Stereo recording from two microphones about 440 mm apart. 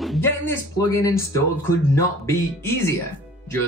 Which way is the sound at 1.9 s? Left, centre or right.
Centre.